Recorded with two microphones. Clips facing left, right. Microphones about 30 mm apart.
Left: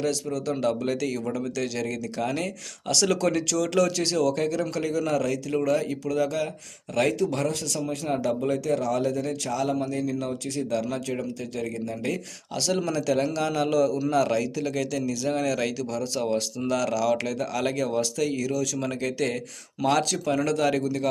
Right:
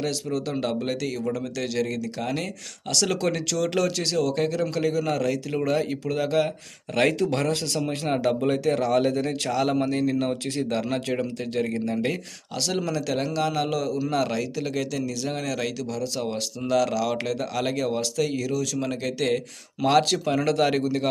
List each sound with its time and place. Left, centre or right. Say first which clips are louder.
0.0 s a man's voice: even; centre; by 6.5 s right
6.9 s speech: right 2 dB; right
12.5 s a man's voice: left 1 dB; centre; by 21.1 s right